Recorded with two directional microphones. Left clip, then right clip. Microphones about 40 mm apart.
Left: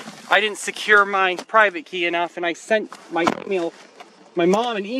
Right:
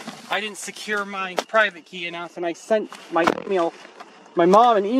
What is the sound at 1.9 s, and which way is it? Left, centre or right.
Speech, centre.